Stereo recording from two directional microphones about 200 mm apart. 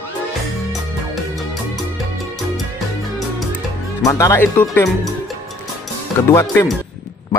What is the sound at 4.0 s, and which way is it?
Speech, 15° left (ahead or behind).